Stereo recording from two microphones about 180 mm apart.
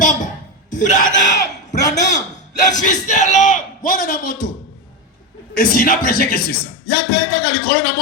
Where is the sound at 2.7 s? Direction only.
45° left (ahead or behind).